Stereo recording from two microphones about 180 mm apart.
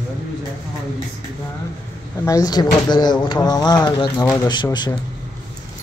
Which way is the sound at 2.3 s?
20° left (ahead or behind).